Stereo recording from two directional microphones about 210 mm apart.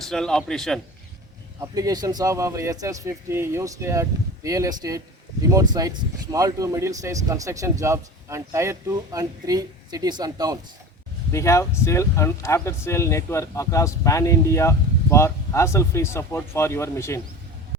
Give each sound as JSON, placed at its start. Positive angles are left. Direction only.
{"t": 0.1, "sound": "a man's voice", "side_deg": 5}
{"t": 1.6, "sound": "speech", "side_deg": -15}
{"t": 11.3, "sound": "speech", "side_deg": 15}